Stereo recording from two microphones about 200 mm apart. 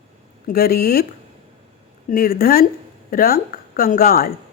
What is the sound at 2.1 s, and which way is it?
Speech, 45° left (ahead or behind).